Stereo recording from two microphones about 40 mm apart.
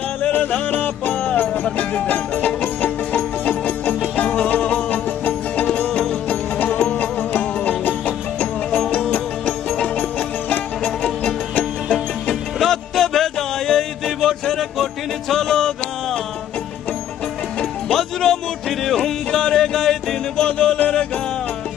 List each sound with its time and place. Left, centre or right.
0.3 s music: left
8.7 s music: left
10.8 s music: centre
12.5 s music: centre
17.8 s music: centre
19.3 s music: left
20.3 s music: left